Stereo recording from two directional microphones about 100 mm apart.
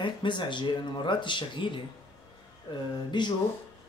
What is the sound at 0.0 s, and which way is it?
Speech, 50° left (ahead or behind).